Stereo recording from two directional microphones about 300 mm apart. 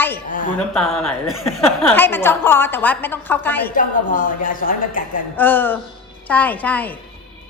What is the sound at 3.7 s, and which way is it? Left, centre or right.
A woman's voice, left.